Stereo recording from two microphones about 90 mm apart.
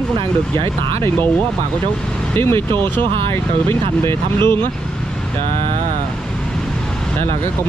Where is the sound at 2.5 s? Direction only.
60° right (ahead or behind).